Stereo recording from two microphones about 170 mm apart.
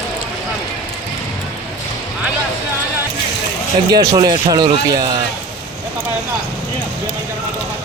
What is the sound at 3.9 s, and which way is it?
Speech, 25° right (ahead or behind).